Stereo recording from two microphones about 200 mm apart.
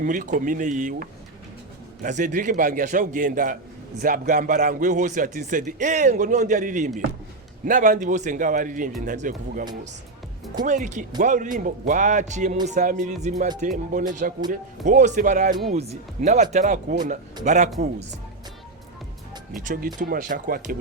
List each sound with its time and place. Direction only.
0.0 s speech: 40° right (ahead or behind)
19.5 s speech: 45° right (ahead or behind)